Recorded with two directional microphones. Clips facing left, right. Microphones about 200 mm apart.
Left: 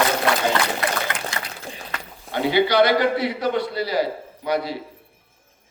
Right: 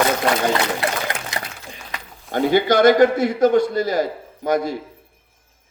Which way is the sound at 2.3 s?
45° right (ahead or behind).